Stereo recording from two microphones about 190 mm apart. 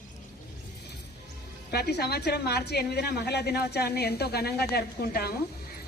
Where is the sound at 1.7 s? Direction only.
60° left (ahead or behind).